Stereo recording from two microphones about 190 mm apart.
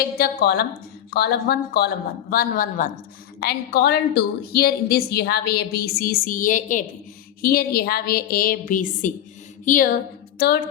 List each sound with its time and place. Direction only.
0.2 s a woman's voice: 55° left (ahead or behind)
3.4 s a woman's voice: 55° left (ahead or behind)